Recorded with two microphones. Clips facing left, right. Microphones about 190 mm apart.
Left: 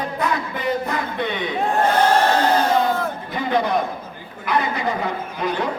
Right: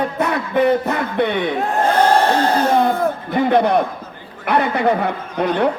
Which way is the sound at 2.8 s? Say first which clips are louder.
Right 4 dB; 60° right (ahead or behind).